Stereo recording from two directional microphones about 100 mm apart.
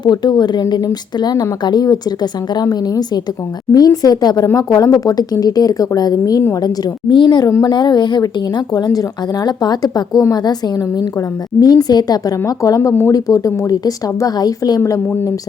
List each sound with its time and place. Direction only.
0.0 s a woman's voice: 45° left (ahead or behind)
14.8 s a woman's voice: 30° left (ahead or behind)